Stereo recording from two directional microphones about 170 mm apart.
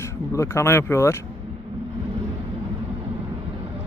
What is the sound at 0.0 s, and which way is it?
Speech, 15° left (ahead or behind).